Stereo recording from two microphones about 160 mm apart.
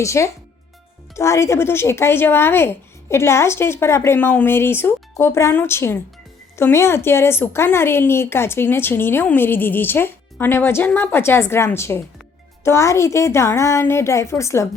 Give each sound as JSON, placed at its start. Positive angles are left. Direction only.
{"t": 0.0, "sound": "speech", "side_deg": 20}